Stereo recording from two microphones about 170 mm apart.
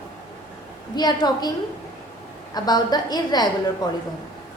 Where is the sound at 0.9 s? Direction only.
25° left (ahead or behind).